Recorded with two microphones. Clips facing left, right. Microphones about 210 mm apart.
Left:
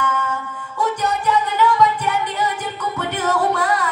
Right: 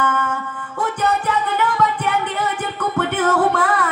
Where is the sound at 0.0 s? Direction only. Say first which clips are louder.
Right 2 dB; 50° right (ahead or behind).